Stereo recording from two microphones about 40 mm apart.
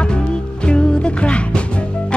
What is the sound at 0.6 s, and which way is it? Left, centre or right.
Music, left.